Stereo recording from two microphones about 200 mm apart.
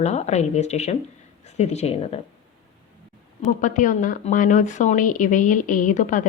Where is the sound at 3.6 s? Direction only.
40° left (ahead or behind).